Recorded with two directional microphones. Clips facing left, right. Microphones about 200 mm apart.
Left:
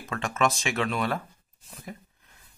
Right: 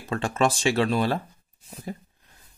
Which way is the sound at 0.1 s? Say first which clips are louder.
Right 3 dB; 30° right (ahead or behind).